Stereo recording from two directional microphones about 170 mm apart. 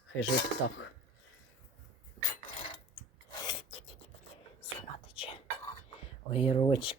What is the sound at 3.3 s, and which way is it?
Filing, 25° left (ahead or behind).